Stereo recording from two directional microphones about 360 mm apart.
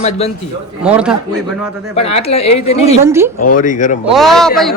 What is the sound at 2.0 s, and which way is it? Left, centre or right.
Speech, centre.